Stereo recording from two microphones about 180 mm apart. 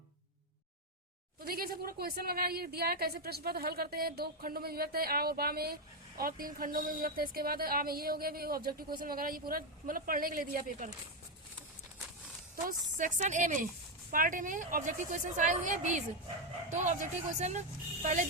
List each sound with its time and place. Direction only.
1.4 s a woman's voice: 55° right (ahead or behind)
12.6 s a woman's voice: 45° right (ahead or behind)